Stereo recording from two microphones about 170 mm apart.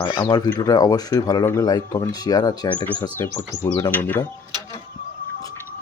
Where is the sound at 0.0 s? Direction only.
25° left (ahead or behind).